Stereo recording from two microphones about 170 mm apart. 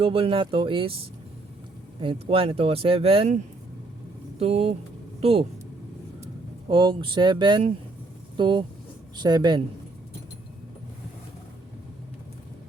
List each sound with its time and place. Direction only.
0.0 s speech: 30° right (ahead or behind)
6.7 s speech: 30° right (ahead or behind)